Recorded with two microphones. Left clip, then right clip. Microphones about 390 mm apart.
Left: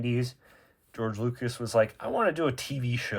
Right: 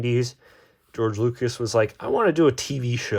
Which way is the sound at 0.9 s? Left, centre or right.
Centre.